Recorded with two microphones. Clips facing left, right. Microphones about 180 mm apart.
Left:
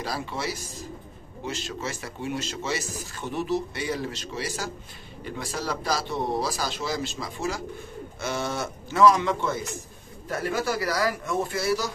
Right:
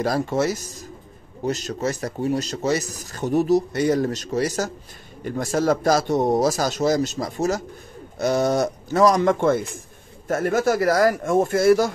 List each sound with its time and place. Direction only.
0.0 s speech: 45° right (ahead or behind)